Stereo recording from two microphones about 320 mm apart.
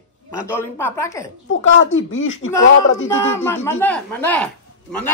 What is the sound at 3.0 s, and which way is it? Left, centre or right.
A man's voice, centre.